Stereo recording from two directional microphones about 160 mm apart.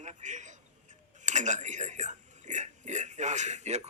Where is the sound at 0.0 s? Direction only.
50° right (ahead or behind).